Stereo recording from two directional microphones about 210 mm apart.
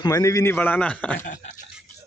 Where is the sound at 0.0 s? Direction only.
15° left (ahead or behind).